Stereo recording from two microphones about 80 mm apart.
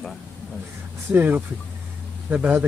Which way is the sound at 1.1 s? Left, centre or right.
Right.